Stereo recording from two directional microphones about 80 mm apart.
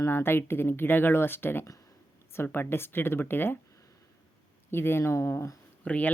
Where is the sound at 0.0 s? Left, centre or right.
Left.